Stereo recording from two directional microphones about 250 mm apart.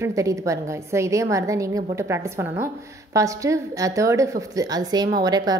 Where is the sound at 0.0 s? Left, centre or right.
Centre.